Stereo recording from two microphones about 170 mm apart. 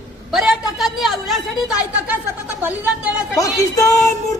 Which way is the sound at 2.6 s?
10° right (ahead or behind).